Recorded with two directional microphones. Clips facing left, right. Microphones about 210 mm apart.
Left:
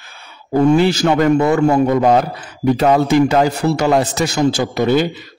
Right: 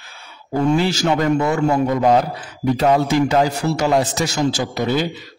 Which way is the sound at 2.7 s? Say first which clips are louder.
Left 3 dB; 60° left (ahead or behind).